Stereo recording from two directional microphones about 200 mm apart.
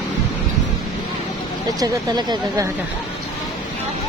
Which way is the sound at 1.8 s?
20° right (ahead or behind).